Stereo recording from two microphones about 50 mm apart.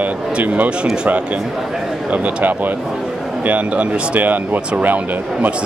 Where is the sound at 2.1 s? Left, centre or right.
Right.